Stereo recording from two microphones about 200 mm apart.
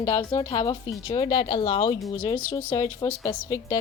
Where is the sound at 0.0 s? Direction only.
20° left (ahead or behind).